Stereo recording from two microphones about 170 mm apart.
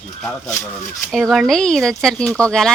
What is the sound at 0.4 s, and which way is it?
Speech, 20° left (ahead or behind).